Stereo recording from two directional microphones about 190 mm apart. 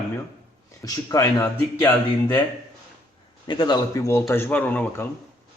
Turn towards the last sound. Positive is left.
turn(degrees=10)  # may be behind; listen again after turning